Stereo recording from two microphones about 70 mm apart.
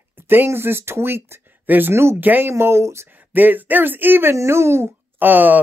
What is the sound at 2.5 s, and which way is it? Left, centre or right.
Speech, right.